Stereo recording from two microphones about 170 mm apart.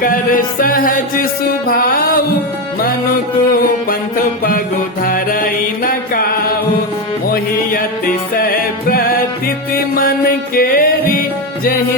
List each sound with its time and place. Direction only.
0.0 s music: 55° left (ahead or behind)
5.0 s music: 55° left (ahead or behind)
7.3 s music: 55° left (ahead or behind)